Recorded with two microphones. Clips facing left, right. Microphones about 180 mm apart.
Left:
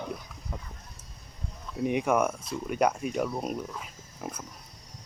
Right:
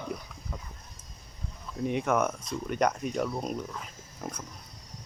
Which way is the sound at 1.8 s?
10° left (ahead or behind).